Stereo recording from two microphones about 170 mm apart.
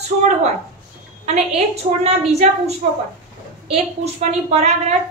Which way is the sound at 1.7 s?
40° right (ahead or behind).